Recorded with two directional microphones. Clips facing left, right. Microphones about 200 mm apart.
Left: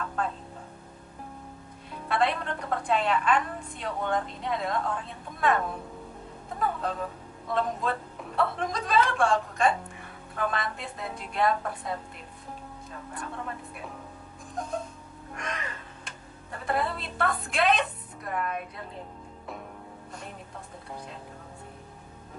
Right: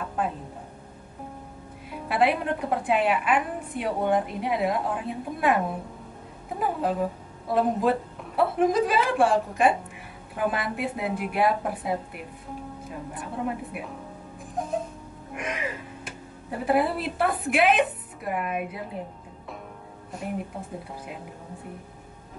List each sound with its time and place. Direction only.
0.0 s a woman's voice: 15° right (ahead or behind)
1.9 s a woman's voice: 10° right (ahead or behind)
6.8 s a woman's voice: 10° right (ahead or behind)
15.3 s music: 10° right (ahead or behind)
16.4 s a woman's voice: 10° right (ahead or behind)